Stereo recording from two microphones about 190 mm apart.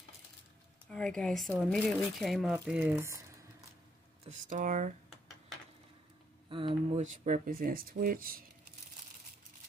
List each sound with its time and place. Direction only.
0.8 s speech: 5° left (ahead or behind); by 3.3 s 15° right (ahead or behind)
4.2 s speech: 40° right (ahead or behind)
6.5 s speech: 25° right (ahead or behind)
7.0 s speech: 40° right (ahead or behind)